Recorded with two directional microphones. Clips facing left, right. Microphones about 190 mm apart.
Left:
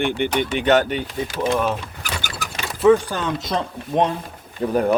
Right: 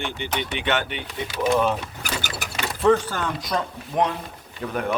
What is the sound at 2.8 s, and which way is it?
Speech, 15° left (ahead or behind).